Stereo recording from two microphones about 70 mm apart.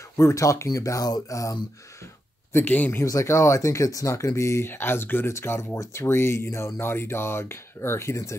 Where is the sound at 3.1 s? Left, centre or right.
Left.